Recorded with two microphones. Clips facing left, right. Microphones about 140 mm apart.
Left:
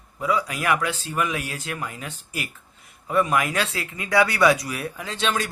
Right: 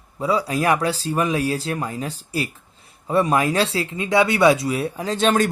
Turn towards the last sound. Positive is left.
turn(degrees=-45)  # may be behind; listen again after turning